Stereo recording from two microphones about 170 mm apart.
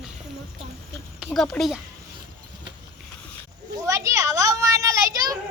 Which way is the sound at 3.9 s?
15° right (ahead or behind).